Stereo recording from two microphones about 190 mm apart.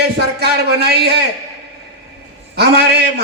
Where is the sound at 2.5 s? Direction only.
60° right (ahead or behind).